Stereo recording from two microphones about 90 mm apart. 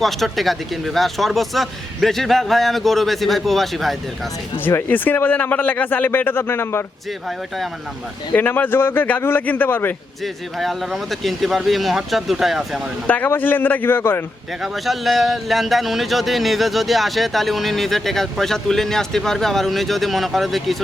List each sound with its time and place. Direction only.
0.0 s speech: centre (ahead or behind)
4.5 s speech: 25° left (ahead or behind)
8.3 s speech: 20° left (ahead or behind)
10.6 s speech: centre (ahead or behind)
13.1 s speech: 20° left (ahead or behind)
14.6 s speech: centre (ahead or behind)